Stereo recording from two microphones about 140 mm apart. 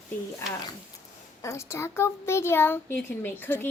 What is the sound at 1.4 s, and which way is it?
A child's voice, 20° left (ahead or behind).